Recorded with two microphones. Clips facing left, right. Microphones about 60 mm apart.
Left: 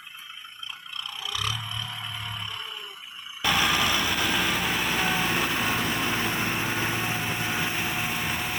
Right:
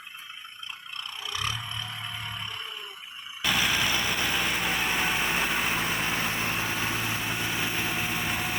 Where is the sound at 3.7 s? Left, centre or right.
Centre.